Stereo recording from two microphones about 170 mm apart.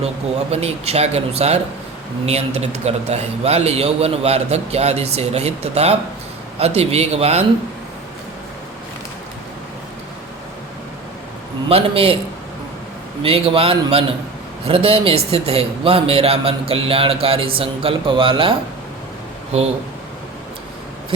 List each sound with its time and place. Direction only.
0.5 s speech: 35° right (ahead or behind)
11.7 s speech: 35° right (ahead or behind)
13.2 s speech: 35° right (ahead or behind)